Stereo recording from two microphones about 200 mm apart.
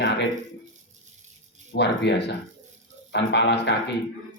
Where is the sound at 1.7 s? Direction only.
60° left (ahead or behind).